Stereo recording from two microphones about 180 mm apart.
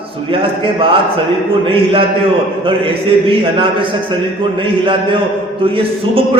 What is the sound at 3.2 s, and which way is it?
A man's voice, 25° right (ahead or behind).